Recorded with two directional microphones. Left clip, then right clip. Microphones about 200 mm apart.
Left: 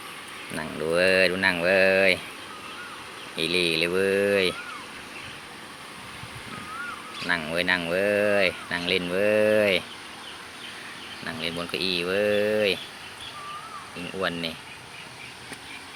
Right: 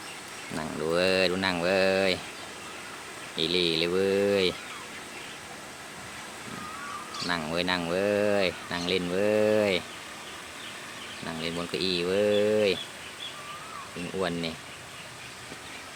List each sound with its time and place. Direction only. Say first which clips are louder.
0.5 s speech: left 3 dB; 5° right (ahead or behind)
3.3 s speech: left 2 dB; 5° right (ahead or behind)
7.3 s speech: left 5 dB; 10° right (ahead or behind)
11.3 s speech: left 3 dB; 20° right (ahead or behind)